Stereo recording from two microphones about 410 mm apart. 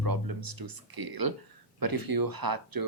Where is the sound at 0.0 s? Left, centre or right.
Right.